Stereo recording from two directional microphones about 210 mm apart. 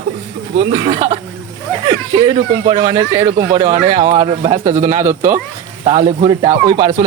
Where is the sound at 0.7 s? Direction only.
25° right (ahead or behind).